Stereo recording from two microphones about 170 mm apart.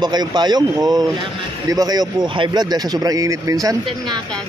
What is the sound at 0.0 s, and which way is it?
Speech, 25° right (ahead or behind).